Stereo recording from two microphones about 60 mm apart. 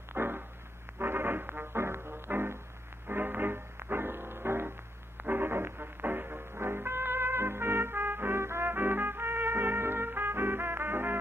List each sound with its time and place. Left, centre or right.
0.1 s music: right